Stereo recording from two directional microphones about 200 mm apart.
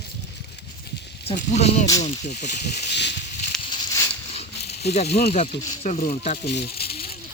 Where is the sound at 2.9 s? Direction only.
60° left (ahead or behind).